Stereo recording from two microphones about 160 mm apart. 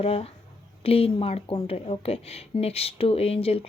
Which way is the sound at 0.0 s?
40° left (ahead or behind).